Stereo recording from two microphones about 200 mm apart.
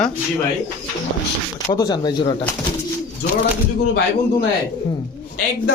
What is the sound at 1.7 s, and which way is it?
Speech, 20° left (ahead or behind).